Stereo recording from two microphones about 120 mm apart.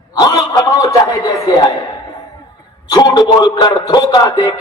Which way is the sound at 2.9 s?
35° left (ahead or behind).